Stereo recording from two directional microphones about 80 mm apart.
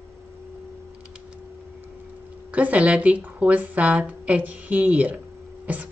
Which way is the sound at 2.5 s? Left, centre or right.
Centre.